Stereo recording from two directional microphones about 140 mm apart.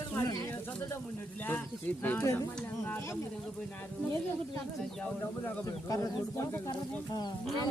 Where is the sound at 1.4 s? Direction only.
15° left (ahead or behind).